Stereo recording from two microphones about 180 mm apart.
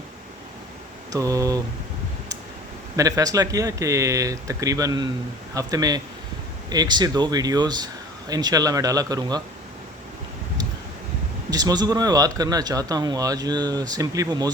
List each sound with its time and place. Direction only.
1.1 s speech: 20° right (ahead or behind)
2.9 s speech: 20° right (ahead or behind)
11.5 s speech: 20° right (ahead or behind)